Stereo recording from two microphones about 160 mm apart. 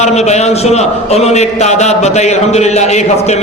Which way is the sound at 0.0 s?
45° left (ahead or behind).